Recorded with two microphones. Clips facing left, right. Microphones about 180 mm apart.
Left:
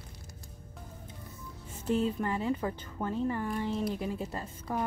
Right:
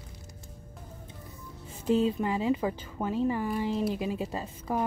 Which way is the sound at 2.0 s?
15° right (ahead or behind).